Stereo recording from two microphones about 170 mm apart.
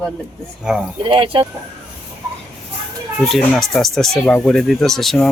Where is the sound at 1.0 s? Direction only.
30° right (ahead or behind).